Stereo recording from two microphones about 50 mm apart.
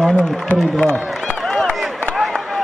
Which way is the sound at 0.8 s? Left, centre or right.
Left.